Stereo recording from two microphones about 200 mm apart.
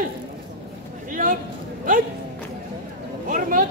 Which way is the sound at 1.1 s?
40° right (ahead or behind).